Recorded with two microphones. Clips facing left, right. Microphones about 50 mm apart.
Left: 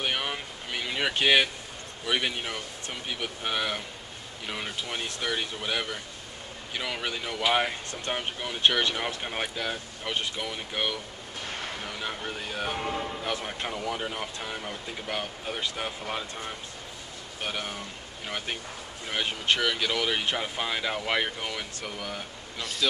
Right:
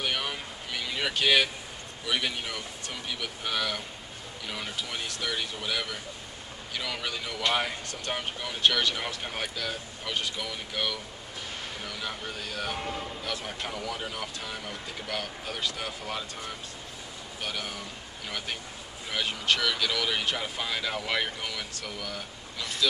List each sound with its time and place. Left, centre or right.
0.0 s a sound: centre
2.0 s speech: centre
17.4 s speech: left
19.0 s speech: centre